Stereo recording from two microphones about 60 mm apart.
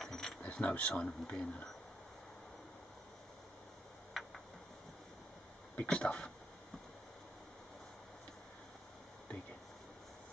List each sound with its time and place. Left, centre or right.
0.0 s a sound: centre
0.4 s speech: left
4.2 s tick-tock: centre
5.8 s speech: centre